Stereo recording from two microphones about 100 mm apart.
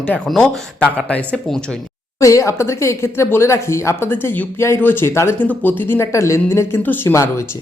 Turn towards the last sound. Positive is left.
turn(degrees=30)  # may be behind; listen again after turning